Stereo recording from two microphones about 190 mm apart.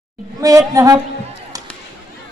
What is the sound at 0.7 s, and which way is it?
Speech, 20° right (ahead or behind).